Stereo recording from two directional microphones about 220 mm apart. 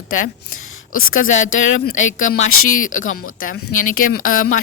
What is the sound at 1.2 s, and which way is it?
Speech, 40° left (ahead or behind).